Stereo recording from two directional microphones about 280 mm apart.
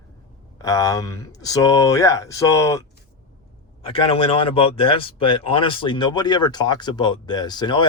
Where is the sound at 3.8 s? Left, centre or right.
Centre.